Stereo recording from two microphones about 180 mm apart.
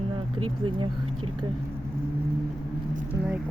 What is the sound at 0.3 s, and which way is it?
Speech, 30° right (ahead or behind).